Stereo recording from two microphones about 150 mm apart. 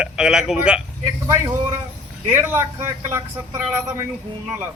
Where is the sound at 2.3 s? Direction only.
15° right (ahead or behind).